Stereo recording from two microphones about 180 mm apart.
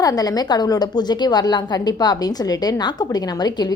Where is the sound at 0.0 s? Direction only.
20° left (ahead or behind).